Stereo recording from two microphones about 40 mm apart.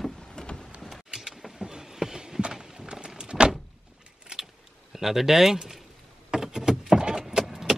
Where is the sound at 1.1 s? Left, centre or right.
Centre.